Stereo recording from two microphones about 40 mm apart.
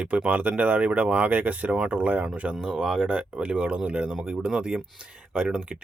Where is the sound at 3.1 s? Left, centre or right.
Right.